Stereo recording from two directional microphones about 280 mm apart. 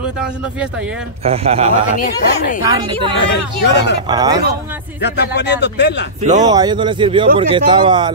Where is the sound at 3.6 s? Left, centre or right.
Left.